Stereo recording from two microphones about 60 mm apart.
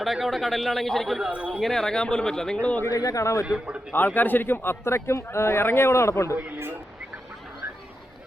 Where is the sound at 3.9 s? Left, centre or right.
Left.